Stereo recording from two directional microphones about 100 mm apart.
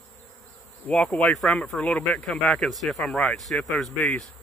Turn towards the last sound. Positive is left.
turn(degrees=15)  # may be behind; listen again after turning